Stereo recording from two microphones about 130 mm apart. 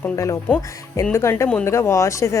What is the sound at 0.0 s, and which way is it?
Speech, 20° left (ahead or behind).